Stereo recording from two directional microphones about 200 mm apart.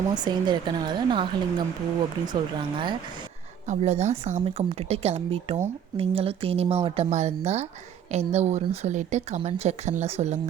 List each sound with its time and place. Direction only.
0.1 s speech: 20° right (ahead or behind)
3.7 s speech: 35° right (ahead or behind)